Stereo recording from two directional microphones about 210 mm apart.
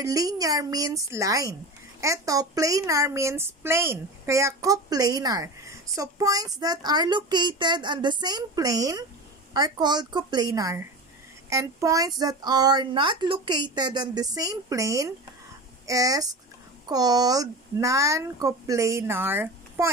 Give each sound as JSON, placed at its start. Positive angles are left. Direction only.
{"t": 0.0, "sound": "a woman's voice", "side_deg": -15}